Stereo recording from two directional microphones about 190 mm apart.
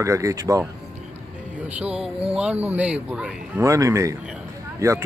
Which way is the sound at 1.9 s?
30° right (ahead or behind).